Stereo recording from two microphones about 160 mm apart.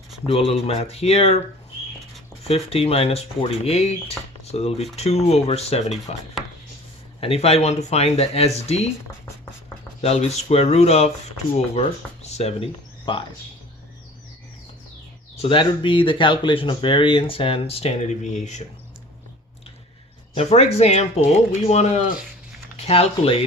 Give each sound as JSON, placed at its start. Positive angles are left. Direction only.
{"t": 0.3, "sound": "speech", "side_deg": 40}
{"t": 2.4, "sound": "speech", "side_deg": 40}
{"t": 10.0, "sound": "speech", "side_deg": 40}
{"t": 15.4, "sound": "speech", "side_deg": 35}
{"t": 20.3, "sound": "speech", "side_deg": 40}